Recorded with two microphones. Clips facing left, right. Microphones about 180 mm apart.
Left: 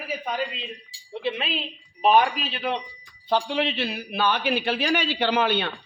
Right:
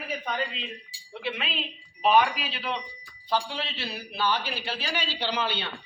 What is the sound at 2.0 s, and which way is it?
Speech, 50° left (ahead or behind).